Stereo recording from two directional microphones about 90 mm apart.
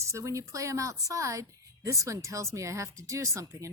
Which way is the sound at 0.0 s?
35° right (ahead or behind).